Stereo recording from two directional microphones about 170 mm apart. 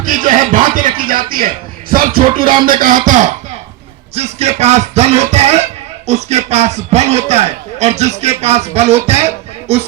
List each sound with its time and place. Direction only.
0.0 s a man's voice: 50° right (ahead or behind)